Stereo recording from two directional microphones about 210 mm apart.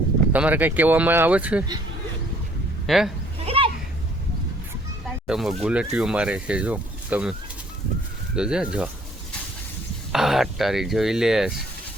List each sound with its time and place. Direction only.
0.3 s speech: 5° right (ahead or behind)
2.8 s speech: centre (ahead or behind)
3.4 s a sound: 25° right (ahead or behind)
5.3 s speech: centre (ahead or behind)
8.4 s speech: 5° right (ahead or behind)
10.1 s speech: centre (ahead or behind)